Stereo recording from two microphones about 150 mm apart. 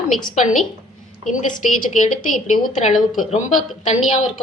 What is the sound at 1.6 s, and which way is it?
A woman's voice, 55° left (ahead or behind).